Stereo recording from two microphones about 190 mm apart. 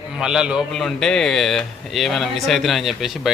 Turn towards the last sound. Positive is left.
turn(degrees=0)  # may be behind; listen again after turning